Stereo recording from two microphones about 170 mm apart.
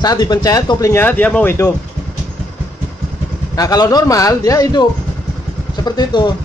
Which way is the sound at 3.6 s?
20° left (ahead or behind).